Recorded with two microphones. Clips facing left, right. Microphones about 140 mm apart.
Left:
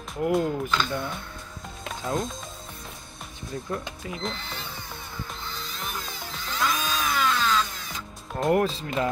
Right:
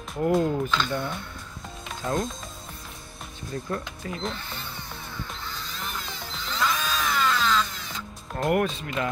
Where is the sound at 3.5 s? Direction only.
10° left (ahead or behind).